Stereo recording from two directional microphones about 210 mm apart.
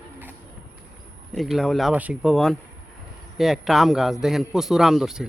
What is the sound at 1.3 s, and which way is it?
A man's voice, centre (ahead or behind).